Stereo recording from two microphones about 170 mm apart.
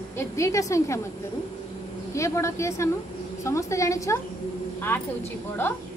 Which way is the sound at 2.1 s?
15° left (ahead or behind).